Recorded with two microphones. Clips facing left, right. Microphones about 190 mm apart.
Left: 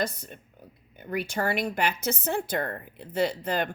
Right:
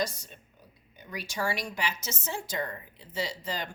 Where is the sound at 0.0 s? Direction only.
55° left (ahead or behind).